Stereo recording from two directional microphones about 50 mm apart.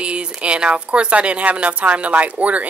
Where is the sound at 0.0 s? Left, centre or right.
Right.